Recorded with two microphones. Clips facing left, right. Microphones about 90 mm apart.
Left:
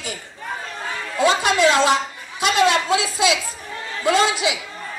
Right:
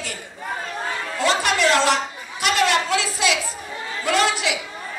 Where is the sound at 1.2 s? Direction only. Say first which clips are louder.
Left 3 dB; 20° left (ahead or behind).